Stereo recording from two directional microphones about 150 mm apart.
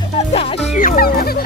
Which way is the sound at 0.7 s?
70° left (ahead or behind).